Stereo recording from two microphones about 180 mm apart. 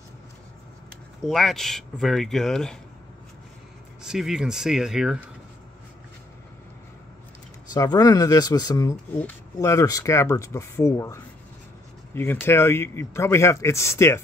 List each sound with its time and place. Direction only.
1.2 s speech: centre (ahead or behind)
4.0 s speech: 5° right (ahead or behind)
7.7 s speech: 20° left (ahead or behind)
12.2 s speech: 15° left (ahead or behind)